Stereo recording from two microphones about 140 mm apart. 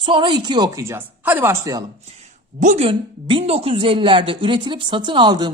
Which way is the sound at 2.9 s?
40° right (ahead or behind).